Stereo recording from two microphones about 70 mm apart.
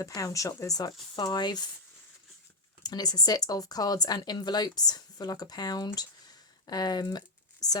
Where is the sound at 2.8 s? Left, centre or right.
Left.